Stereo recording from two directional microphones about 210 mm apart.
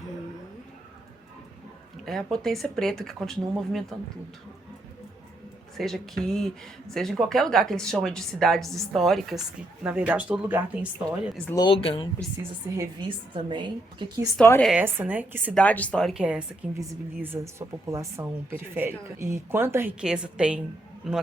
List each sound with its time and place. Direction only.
2.0 s speech: centre (ahead or behind)
5.7 s speech: centre (ahead or behind)
11.4 s speech: 20° left (ahead or behind)
12.7 s a woman's voice: 20° right (ahead or behind)
14.3 s a woman's voice: 10° left (ahead or behind)
14.7 s a woman's voice: 5° right (ahead or behind)
15.5 s a woman's voice: 5° left (ahead or behind)